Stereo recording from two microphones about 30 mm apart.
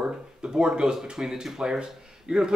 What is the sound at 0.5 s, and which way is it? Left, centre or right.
Speech, right.